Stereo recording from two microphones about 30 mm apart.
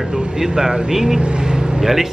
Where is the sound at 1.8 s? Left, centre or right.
Centre.